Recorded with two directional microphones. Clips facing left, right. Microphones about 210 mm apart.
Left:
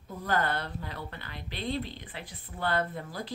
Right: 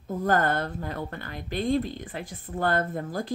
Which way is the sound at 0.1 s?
45° right (ahead or behind).